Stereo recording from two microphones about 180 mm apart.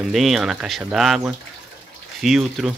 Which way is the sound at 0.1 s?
Centre (ahead or behind).